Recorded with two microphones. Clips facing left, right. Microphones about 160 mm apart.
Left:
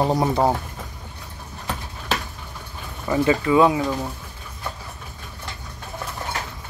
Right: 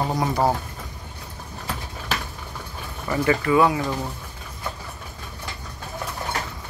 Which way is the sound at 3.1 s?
20° left (ahead or behind).